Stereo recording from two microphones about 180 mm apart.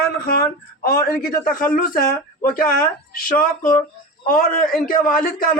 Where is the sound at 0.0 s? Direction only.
55° left (ahead or behind).